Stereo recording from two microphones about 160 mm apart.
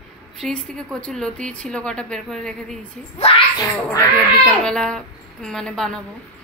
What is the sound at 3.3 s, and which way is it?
Speech, 35° left (ahead or behind).